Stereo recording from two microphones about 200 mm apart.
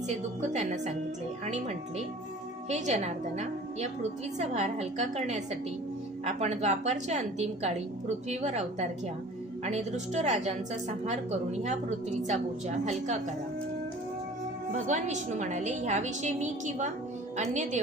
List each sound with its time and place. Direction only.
0.5 s a woman's voice: 35° right (ahead or behind)
14.7 s a woman's voice: 35° right (ahead or behind)